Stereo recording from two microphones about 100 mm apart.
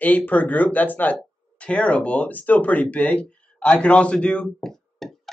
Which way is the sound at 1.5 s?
10° left (ahead or behind).